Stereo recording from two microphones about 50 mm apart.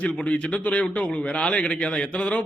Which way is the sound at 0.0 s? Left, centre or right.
Left.